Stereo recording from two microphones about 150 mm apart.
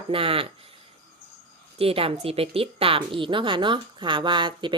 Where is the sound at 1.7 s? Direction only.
40° right (ahead or behind).